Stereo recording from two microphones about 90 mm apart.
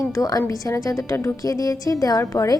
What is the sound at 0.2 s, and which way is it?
A woman's voice, 40° left (ahead or behind).